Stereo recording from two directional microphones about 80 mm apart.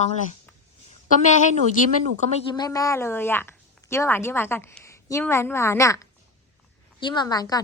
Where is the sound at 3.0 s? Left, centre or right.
Left.